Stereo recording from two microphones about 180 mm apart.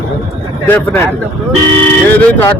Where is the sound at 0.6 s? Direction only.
10° left (ahead or behind).